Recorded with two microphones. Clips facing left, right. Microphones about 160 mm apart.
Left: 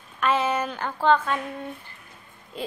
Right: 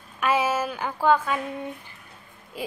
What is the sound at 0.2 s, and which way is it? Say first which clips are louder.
A woman's voice: even; 10° right (ahead or behind).